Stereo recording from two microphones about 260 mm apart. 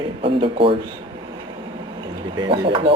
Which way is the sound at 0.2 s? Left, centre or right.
Right.